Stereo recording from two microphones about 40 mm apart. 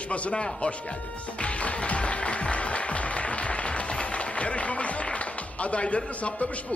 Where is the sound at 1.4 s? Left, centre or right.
Left.